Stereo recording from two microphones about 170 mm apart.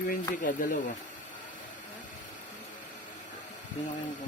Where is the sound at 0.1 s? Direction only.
50° left (ahead or behind).